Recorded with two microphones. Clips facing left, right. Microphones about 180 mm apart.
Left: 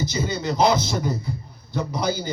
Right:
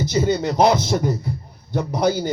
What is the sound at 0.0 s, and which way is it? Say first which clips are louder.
Speech: right 6 dB; 65° right (ahead or behind).